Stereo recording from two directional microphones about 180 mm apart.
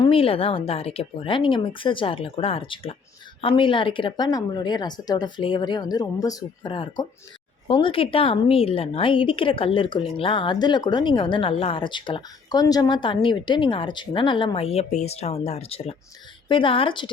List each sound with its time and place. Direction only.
0.0 s a woman's voice: 30° left (ahead or behind)